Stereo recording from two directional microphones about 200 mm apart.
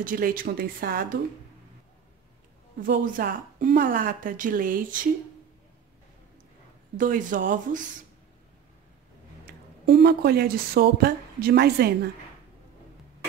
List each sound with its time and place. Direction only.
0.0 s a woman's voice: 45° right (ahead or behind)
2.8 s a woman's voice: 45° right (ahead or behind)
7.0 s speech: 40° right (ahead or behind)
9.5 s speech: 50° right (ahead or behind)